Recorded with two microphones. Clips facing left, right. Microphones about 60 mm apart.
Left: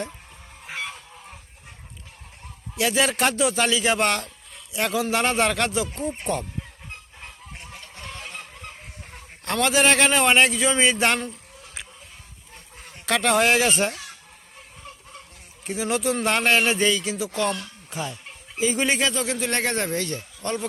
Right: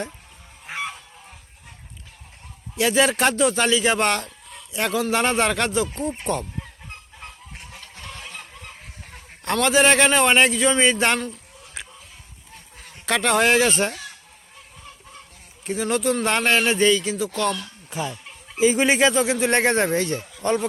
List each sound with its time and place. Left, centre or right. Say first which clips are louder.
2.7 s speech: right 3 dB; centre
9.4 s speech: right 2 dB; centre
13.1 s speech: right 1 dB; centre
15.6 s speech: right 2 dB; centre
18.6 s speech: right 5 dB; centre